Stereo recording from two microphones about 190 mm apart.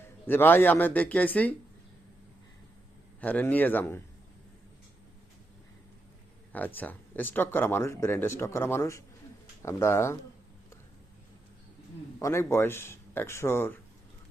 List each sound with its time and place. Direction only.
0.3 s speech: 10° left (ahead or behind)
3.2 s speech: 10° left (ahead or behind)
6.5 s speech: 10° left (ahead or behind)
12.2 s speech: 15° left (ahead or behind)